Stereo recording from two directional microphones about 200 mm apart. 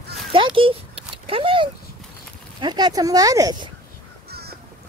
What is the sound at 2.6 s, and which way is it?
Speech, 20° right (ahead or behind).